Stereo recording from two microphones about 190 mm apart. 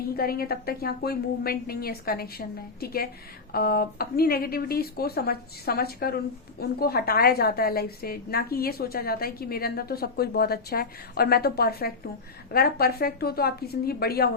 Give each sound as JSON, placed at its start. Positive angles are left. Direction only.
{"t": 0.2, "sound": "a woman's voice", "side_deg": 50}